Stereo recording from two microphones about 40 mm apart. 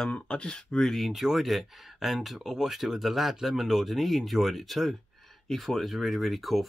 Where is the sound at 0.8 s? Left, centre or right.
Centre.